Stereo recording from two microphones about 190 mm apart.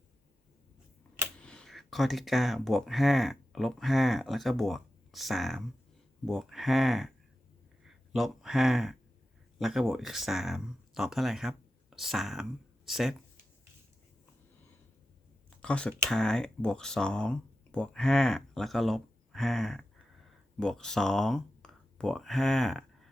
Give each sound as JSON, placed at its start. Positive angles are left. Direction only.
{"t": 1.4, "sound": "speech", "side_deg": 5}
{"t": 15.6, "sound": "speech", "side_deg": 5}